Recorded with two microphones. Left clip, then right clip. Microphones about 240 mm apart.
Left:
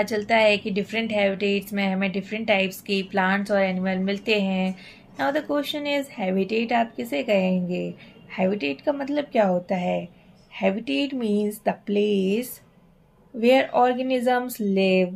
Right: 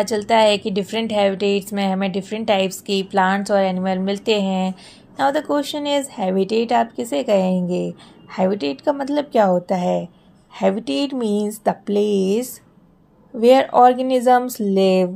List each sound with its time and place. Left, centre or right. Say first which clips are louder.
0.0 s a woman's voice: right 4 dB; right